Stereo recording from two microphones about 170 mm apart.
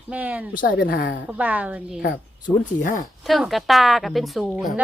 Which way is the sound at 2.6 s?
50° left (ahead or behind).